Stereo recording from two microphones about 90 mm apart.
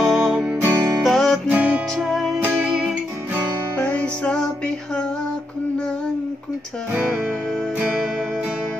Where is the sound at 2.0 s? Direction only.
5° right (ahead or behind).